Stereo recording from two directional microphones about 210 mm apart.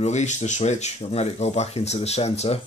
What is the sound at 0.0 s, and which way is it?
Speech, 35° left (ahead or behind).